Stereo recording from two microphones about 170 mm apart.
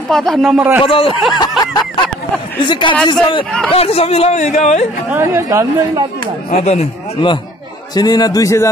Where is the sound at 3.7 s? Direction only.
35° left (ahead or behind).